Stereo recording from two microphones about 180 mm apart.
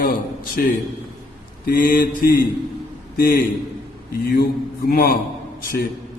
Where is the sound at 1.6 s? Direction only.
50° left (ahead or behind).